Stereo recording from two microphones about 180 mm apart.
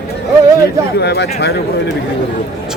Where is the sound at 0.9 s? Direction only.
65° left (ahead or behind).